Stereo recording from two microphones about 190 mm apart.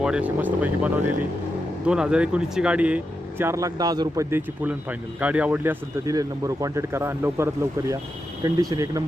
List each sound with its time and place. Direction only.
0.0 s speech: 5° right (ahead or behind)